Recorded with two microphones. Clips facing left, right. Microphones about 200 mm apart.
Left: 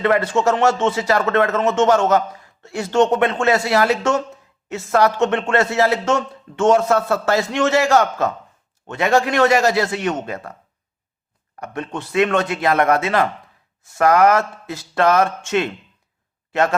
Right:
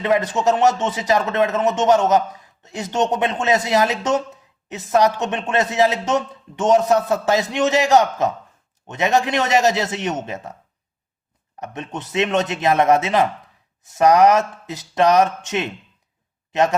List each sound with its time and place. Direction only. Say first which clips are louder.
0.0 s a man's voice: left 1 dB; 15° right (ahead or behind)
11.6 s a man's voice: left 2 dB; 20° right (ahead or behind)